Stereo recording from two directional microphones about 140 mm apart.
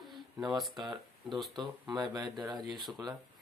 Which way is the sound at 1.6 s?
30° right (ahead or behind).